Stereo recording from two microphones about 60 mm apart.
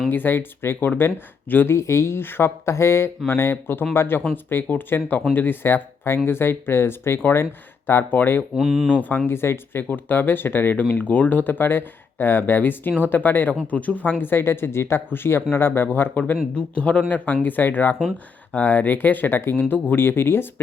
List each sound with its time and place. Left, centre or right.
0.1 s speech: left
1.7 s speech: left
8.5 s speech: centre
9.0 s speech: left
9.2 s speech: left